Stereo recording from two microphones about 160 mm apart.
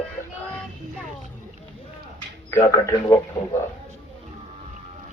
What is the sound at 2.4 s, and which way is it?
Speech, 15° left (ahead or behind).